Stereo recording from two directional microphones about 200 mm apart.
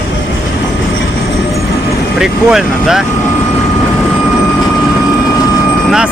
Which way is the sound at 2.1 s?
5° right (ahead or behind).